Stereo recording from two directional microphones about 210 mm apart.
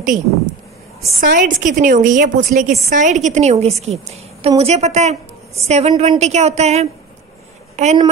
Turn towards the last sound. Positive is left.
turn(degrees=-35)  # may be behind; listen again after turning